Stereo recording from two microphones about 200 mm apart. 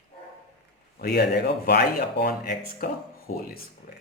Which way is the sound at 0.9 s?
50° left (ahead or behind).